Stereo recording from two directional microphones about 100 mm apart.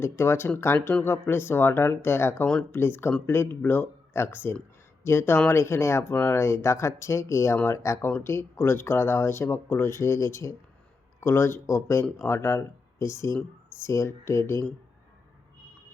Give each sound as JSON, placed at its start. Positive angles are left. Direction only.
{"t": 0.0, "sound": "speech", "side_deg": 25}